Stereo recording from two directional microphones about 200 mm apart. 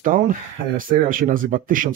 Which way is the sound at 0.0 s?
45° right (ahead or behind).